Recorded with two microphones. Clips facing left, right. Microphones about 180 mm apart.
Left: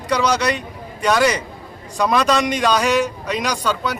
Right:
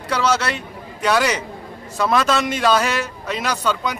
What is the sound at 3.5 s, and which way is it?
Speech, 10° left (ahead or behind).